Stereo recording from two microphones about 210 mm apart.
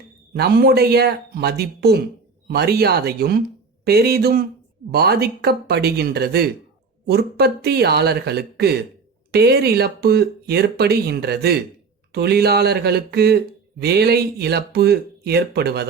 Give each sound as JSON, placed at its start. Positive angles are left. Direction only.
{"t": 0.3, "sound": "speech", "side_deg": -45}